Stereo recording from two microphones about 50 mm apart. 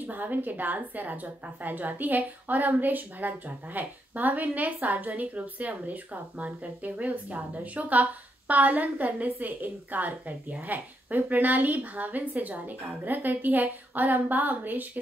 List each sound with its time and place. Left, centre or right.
0.0 s a woman's voice: right